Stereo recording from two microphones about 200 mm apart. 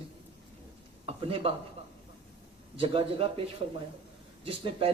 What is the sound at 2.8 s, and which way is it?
Speech, 25° right (ahead or behind).